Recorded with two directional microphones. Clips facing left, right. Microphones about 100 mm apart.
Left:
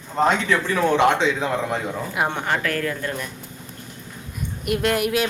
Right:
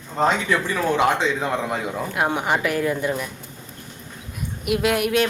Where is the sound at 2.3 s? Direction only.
15° right (ahead or behind).